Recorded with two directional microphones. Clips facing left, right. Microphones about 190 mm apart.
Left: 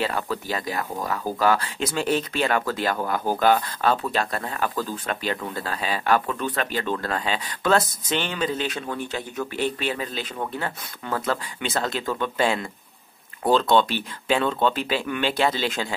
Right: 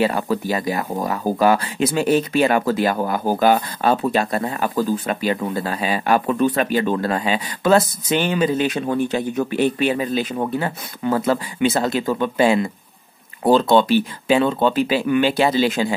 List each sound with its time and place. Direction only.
0.0 s speech: 10° right (ahead or behind)